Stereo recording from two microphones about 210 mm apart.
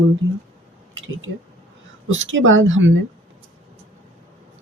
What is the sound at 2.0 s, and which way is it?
Speech, 65° right (ahead or behind).